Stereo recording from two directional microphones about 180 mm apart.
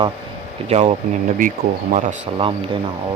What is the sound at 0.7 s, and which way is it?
Speech, 35° right (ahead or behind).